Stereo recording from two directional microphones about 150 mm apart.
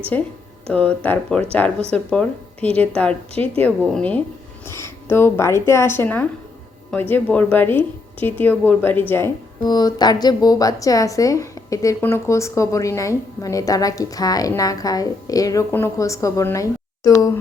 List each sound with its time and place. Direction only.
0.1 s a woman's voice: 10° left (ahead or behind)
4.7 s a woman's voice: 15° left (ahead or behind)
9.6 s a woman's voice: 25° left (ahead or behind)